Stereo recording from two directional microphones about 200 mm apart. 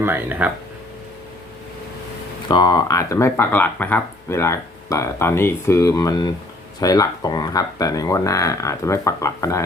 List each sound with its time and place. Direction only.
0.0 s speech: 10° right (ahead or behind)
2.5 s speech: 20° left (ahead or behind)